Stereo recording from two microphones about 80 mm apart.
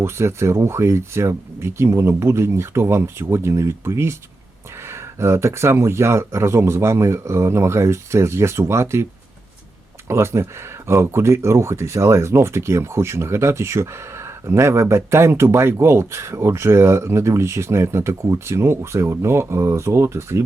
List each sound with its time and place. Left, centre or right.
0.0 s speech: right
10.1 s speech: right